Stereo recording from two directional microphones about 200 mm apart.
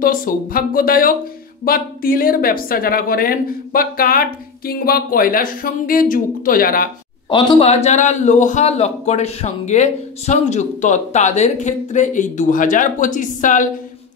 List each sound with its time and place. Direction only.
0.0 s a woman's voice: 45° left (ahead or behind)
7.2 s a man's voice: 25° left (ahead or behind); by 13.7 s 40° left (ahead or behind)